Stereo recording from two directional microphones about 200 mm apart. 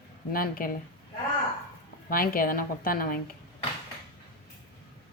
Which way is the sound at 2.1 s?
45° left (ahead or behind).